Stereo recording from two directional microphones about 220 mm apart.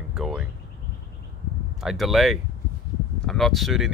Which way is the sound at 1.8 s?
Centre (ahead or behind).